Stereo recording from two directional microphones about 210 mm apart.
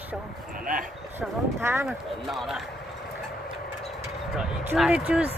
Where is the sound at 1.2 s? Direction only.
15° right (ahead or behind).